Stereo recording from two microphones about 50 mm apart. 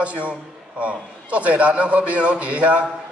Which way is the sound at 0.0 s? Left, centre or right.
Right.